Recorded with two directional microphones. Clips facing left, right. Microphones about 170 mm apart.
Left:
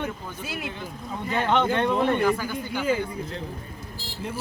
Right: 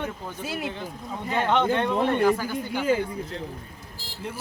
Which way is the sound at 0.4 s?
40° right (ahead or behind).